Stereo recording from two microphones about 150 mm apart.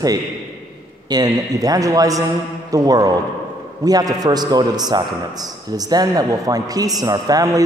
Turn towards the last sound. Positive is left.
turn(degrees=-25)  # may be behind; listen again after turning